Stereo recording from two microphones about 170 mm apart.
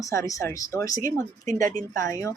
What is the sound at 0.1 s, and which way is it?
Speech, 15° left (ahead or behind).